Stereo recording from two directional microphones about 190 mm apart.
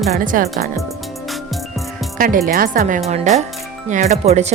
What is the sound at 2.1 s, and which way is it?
A woman's voice, 45° right (ahead or behind).